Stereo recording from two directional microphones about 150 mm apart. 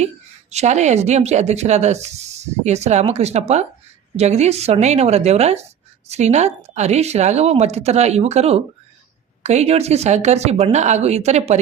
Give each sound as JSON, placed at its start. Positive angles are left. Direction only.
{"t": 0.5, "sound": "speech", "side_deg": -50}